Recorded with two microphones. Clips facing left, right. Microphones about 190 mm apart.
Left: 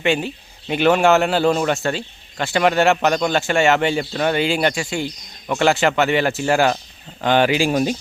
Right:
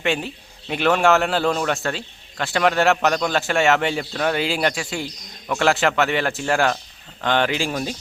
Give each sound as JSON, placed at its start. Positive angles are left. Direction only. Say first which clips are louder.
{"t": 0.0, "sound": "a man's voice", "louder": "left 4 dB", "side_deg": 0}
{"t": 7.7, "sound": "speech", "louder": "left 7 dB", "side_deg": 20}